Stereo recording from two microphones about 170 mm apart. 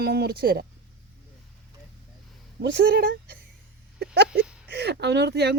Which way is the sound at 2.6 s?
65° right (ahead or behind).